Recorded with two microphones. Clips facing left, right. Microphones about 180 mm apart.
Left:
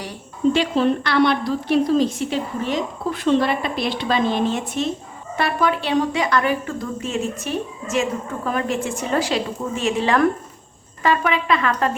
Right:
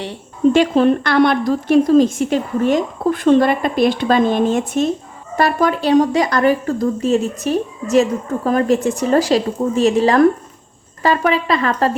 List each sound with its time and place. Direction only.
0.5 s a woman's voice: 50° right (ahead or behind)